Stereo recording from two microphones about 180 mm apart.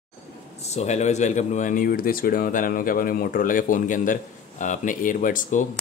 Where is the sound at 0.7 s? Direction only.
40° left (ahead or behind).